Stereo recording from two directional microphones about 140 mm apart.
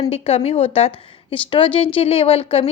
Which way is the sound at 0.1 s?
50° left (ahead or behind).